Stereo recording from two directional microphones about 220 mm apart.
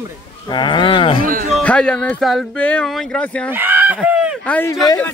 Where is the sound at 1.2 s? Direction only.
40° right (ahead or behind).